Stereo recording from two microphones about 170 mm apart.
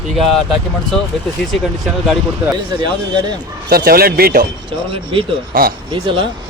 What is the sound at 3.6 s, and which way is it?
Speech, 60° right (ahead or behind).